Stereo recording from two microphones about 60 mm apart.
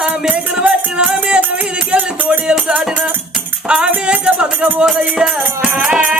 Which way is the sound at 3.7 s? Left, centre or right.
Centre.